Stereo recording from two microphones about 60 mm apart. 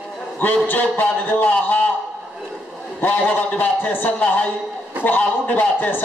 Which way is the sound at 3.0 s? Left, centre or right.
Left.